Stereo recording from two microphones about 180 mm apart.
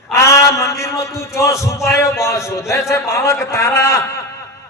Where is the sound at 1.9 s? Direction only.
15° left (ahead or behind).